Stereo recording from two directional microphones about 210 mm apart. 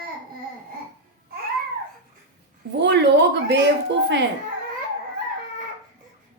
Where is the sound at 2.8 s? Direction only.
55° right (ahead or behind).